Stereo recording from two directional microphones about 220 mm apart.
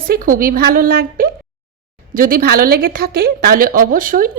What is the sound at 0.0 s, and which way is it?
A woman's voice, 40° right (ahead or behind).